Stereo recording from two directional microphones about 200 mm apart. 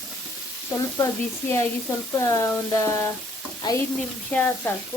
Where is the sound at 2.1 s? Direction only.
15° left (ahead or behind).